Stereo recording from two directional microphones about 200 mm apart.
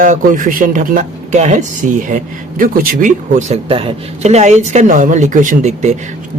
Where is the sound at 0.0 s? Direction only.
40° right (ahead or behind).